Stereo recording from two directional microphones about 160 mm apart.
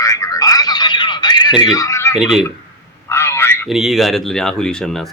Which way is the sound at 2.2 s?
5° right (ahead or behind).